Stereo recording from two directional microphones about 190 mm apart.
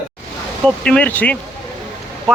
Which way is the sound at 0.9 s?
5° left (ahead or behind).